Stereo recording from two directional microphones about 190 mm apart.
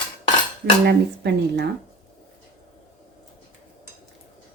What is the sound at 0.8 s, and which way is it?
Speech, 60° right (ahead or behind).